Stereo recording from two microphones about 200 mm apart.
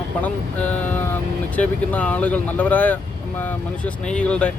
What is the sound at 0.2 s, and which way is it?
Speech, 5° left (ahead or behind).